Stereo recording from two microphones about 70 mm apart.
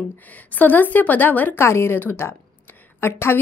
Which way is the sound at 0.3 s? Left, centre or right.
Left.